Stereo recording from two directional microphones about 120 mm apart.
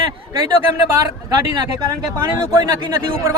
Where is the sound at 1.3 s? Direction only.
35° right (ahead or behind).